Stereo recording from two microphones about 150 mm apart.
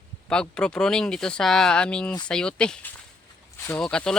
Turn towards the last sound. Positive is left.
turn(degrees=5)  # may be behind; listen again after turning